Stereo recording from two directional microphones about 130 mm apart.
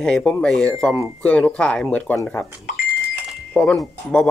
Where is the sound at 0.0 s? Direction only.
5° left (ahead or behind).